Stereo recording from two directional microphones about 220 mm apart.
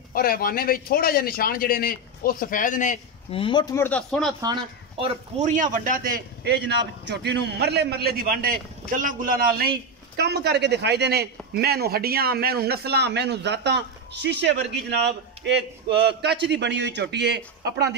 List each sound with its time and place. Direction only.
0.1 s a man's voice: 40° left (ahead or behind); by 4.3 s 5° left (ahead or behind)
5.4 s a man's voice: 35° right (ahead or behind); by 17.9 s 50° right (ahead or behind)